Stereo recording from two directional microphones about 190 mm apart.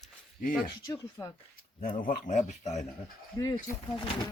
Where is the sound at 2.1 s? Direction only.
40° left (ahead or behind).